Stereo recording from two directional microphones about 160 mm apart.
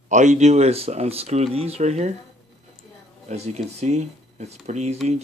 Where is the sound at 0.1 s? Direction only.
50° right (ahead or behind).